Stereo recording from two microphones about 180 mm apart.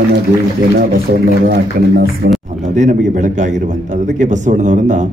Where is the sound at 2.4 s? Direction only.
40° right (ahead or behind).